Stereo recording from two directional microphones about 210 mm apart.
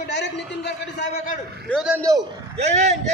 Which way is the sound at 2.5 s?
35° right (ahead or behind).